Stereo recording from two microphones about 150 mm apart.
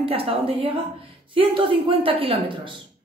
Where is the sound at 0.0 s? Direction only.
40° right (ahead or behind).